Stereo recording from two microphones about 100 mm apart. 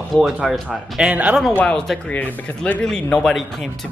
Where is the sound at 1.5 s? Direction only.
15° left (ahead or behind).